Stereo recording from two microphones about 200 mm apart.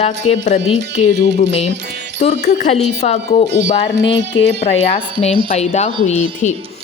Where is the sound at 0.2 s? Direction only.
90° left.